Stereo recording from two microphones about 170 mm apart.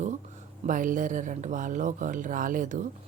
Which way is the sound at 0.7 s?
50° right (ahead or behind).